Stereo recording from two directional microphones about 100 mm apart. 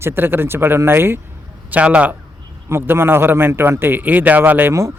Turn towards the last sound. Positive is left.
turn(degrees=-25)  # may be behind; listen again after turning